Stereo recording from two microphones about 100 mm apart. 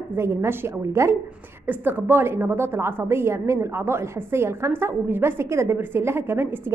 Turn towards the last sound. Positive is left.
turn(degrees=-25)  # may be behind; listen again after turning